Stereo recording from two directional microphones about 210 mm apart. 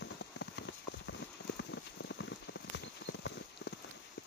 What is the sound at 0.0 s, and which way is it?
Rain on surface, 55° left (ahead or behind).